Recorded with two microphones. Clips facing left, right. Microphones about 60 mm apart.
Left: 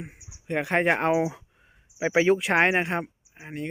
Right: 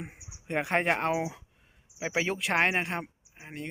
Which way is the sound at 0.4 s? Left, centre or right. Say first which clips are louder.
Left 4 dB; centre.